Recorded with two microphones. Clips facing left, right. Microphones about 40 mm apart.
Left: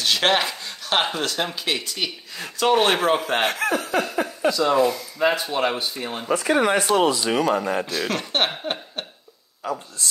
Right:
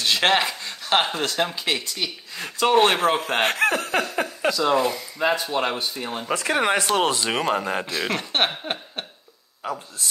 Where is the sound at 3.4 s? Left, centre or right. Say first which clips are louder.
Right 2 dB; right.